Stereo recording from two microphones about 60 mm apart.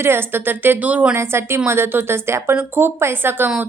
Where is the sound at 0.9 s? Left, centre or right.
Right.